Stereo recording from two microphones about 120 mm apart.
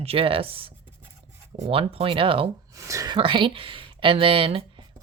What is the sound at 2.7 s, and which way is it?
Speech, 30° right (ahead or behind).